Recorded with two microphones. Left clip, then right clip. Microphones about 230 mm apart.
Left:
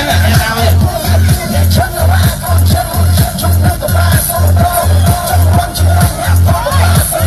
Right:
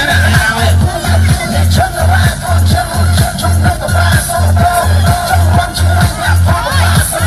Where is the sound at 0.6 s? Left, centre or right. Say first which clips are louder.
Even; left.